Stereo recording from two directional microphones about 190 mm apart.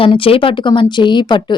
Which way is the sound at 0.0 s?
30° left (ahead or behind).